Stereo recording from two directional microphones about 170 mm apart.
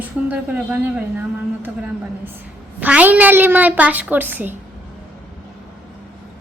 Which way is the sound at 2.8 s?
10° right (ahead or behind).